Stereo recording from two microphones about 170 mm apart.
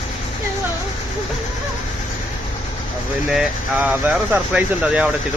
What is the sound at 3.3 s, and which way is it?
Speech, 5° right (ahead or behind).